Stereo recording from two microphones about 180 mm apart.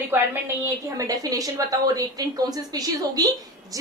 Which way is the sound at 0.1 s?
10° right (ahead or behind).